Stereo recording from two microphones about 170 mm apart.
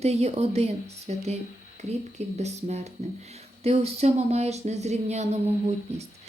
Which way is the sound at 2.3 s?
40° right (ahead or behind).